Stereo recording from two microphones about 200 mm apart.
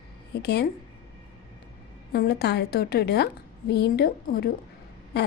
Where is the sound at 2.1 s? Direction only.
55° left (ahead or behind).